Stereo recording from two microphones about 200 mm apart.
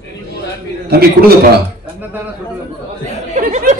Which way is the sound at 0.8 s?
50° right (ahead or behind).